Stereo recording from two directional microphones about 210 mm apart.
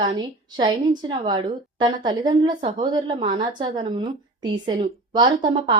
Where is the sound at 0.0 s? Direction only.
20° right (ahead or behind).